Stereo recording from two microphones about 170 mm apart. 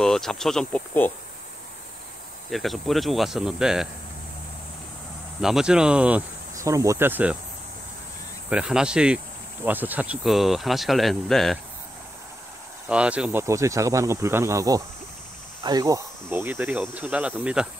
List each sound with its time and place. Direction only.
0.0 s speech: centre (ahead or behind)
2.5 s speech: centre (ahead or behind)
5.4 s speech: 5° right (ahead or behind)
6.5 s speech: 20° right (ahead or behind)
8.5 s speech: 5° right (ahead or behind)
12.8 s speech: 5° right (ahead or behind)